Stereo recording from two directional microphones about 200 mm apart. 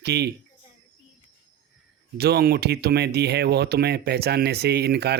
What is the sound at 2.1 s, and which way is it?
Speech, 55° right (ahead or behind).